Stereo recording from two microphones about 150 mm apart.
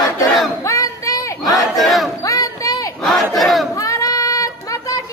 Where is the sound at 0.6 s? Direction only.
20° left (ahead or behind).